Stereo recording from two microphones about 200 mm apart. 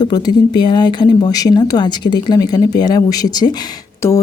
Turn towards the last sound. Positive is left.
turn(degrees=15)  # may be behind; listen again after turning